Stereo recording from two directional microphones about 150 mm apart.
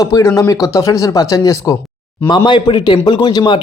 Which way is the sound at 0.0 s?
20° left (ahead or behind).